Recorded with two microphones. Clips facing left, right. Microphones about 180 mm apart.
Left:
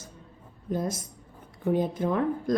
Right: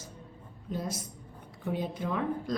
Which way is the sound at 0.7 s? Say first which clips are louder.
Left 6 dB; 50° left (ahead or behind).